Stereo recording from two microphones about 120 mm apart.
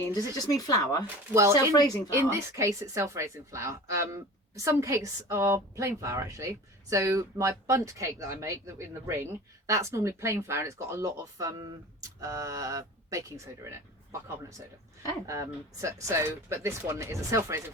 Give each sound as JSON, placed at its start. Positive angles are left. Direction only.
{"t": 0.1, "sound": "speech", "side_deg": 30}
{"t": 1.3, "sound": "a woman's voice", "side_deg": -20}
{"t": 15.8, "sound": "a woman's voice", "side_deg": -25}